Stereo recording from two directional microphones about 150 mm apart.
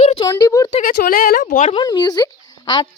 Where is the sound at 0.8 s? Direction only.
65° left (ahead or behind).